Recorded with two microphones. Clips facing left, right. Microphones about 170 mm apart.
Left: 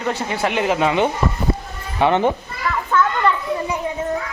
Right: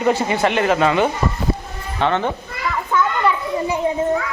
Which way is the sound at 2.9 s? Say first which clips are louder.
Left 1 dB; 15° right (ahead or behind).